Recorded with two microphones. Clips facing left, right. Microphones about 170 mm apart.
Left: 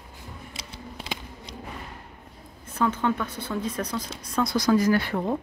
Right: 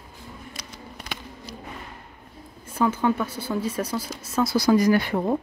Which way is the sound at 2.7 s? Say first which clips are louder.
Right 3 dB; 10° right (ahead or behind).